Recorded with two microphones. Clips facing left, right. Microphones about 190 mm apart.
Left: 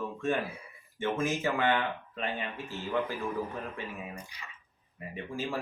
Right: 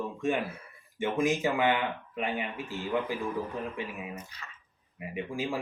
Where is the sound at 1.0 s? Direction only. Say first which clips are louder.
Right 3 dB; 15° right (ahead or behind).